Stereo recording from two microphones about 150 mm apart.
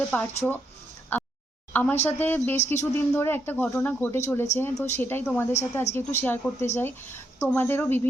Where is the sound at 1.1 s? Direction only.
10° left (ahead or behind).